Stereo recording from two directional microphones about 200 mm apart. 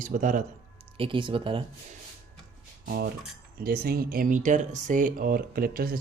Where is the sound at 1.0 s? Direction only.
25° right (ahead or behind).